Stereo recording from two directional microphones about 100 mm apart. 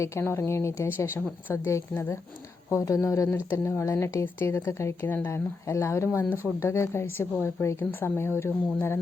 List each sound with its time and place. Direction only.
0.0 s a woman's voice: 25° left (ahead or behind)